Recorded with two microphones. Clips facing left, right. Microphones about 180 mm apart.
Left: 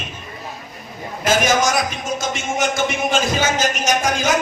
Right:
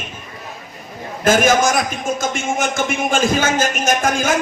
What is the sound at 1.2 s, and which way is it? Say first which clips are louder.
Speech: right 3 dB; 50° right (ahead or behind).